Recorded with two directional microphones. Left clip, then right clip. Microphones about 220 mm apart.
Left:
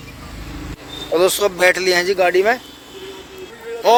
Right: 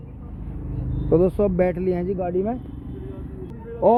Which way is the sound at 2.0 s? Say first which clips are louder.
Left 10 dB; 85° left.